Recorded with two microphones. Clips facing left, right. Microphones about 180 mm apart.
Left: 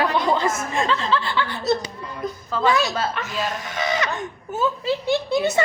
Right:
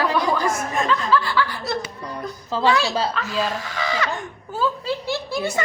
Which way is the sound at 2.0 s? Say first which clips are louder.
Left 1 dB; 40° right (ahead or behind).